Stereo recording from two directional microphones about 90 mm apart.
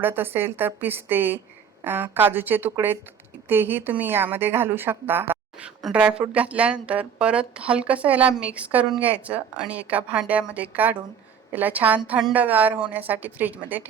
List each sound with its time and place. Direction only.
0.0 s a woman's voice: 25° right (ahead or behind)
5.9 s a woman's voice: 10° right (ahead or behind)